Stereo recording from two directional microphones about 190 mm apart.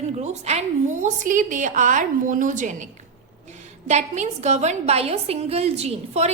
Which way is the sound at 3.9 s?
40° right (ahead or behind).